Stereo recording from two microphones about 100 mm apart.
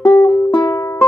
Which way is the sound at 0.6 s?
30° left (ahead or behind).